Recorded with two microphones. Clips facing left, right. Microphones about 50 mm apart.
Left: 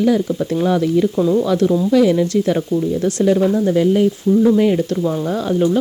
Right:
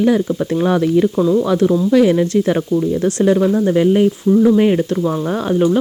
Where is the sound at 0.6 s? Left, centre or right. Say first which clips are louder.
Right 2 dB; right.